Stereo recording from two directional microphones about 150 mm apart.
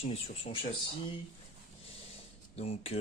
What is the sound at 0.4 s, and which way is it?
Speech, 35° left (ahead or behind).